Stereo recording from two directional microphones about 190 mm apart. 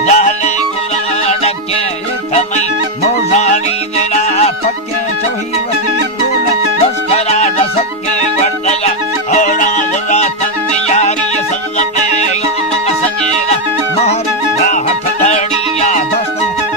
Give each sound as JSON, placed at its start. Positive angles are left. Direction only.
{"t": 0.0, "sound": "music", "side_deg": 40}
{"t": 3.0, "sound": "music", "side_deg": 35}
{"t": 7.1, "sound": "music", "side_deg": 35}
{"t": 9.3, "sound": "music", "side_deg": 40}
{"t": 14.7, "sound": "music", "side_deg": 35}